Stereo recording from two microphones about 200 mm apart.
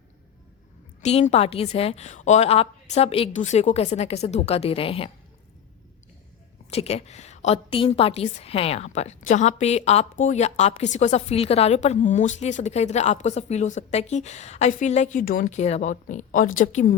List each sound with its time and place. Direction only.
1.0 s a woman's voice: 30° left (ahead or behind)
6.7 s a woman's voice: 30° left (ahead or behind)